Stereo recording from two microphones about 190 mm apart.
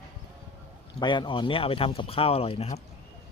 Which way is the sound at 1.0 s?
25° left (ahead or behind).